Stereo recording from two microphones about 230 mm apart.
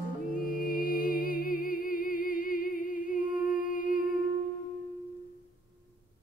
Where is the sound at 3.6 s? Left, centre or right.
Left.